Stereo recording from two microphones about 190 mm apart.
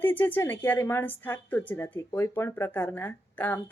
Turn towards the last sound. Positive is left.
turn(degrees=10)  # may be behind; listen again after turning